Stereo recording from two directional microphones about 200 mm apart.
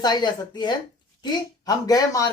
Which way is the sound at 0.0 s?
20° left (ahead or behind).